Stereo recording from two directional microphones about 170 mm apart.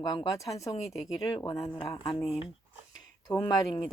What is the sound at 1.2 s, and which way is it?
Speech, 25° left (ahead or behind).